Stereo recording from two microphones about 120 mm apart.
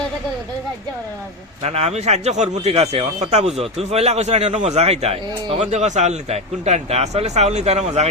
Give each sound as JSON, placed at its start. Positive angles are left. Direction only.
{"t": 1.6, "sound": "speech", "side_deg": -65}